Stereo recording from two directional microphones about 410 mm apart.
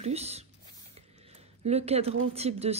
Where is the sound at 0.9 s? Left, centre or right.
Centre.